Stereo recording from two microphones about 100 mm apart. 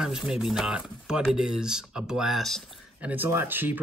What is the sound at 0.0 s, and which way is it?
Speech, 5° right (ahead or behind).